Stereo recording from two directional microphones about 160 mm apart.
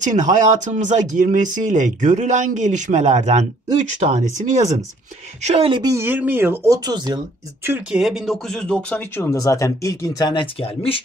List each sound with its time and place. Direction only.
0.0 s speech: 50° right (ahead or behind)
5.4 s speech: 45° right (ahead or behind)
5.7 s speech: 25° right (ahead or behind)
7.6 s speech: 10° right (ahead or behind); by 11.0 s 35° left (ahead or behind)